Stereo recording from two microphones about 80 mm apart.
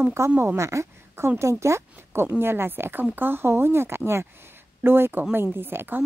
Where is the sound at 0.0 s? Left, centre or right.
Right.